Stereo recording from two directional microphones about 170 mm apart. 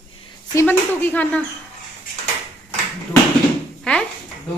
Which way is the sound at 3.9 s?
5° left (ahead or behind).